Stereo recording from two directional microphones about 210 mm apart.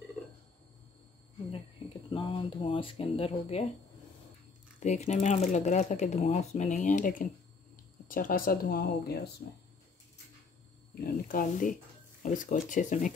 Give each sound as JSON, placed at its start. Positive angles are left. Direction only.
{"t": 2.1, "sound": "speech", "side_deg": 25}
{"t": 4.7, "sound": "speech", "side_deg": 35}
{"t": 11.2, "sound": "speech", "side_deg": 40}